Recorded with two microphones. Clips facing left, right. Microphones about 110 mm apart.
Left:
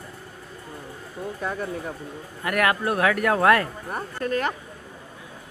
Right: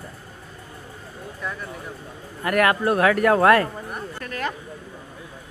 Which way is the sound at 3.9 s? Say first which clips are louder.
Left 6 dB; 30° left (ahead or behind).